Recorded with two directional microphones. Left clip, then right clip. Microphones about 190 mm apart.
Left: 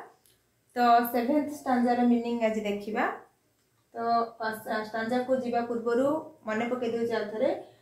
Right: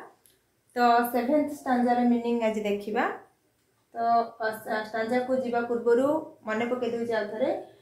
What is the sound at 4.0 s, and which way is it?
A woman's voice, 10° right (ahead or behind).